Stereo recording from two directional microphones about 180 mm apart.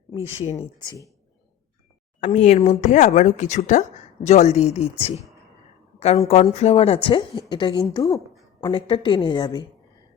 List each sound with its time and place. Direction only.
0.1 s speech: 30° left (ahead or behind)
2.2 s a woman's voice: 40° left (ahead or behind); by 9.6 s 25° left (ahead or behind)